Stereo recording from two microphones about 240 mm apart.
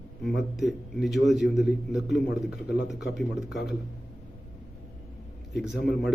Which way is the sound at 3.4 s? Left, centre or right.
Left.